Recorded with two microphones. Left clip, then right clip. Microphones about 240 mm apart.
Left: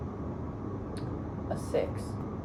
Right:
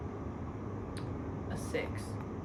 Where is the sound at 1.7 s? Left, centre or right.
Centre.